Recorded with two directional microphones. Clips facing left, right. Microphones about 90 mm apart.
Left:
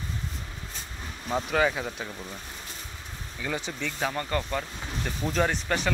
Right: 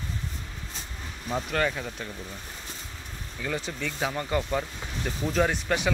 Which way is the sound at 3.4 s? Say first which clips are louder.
Even; centre (ahead or behind).